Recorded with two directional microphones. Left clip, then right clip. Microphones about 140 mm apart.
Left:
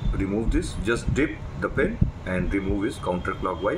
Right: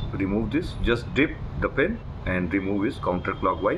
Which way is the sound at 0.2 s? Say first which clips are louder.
Even; 20° right (ahead or behind).